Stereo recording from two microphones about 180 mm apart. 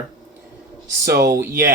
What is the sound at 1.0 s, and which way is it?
Speech, 60° right (ahead or behind).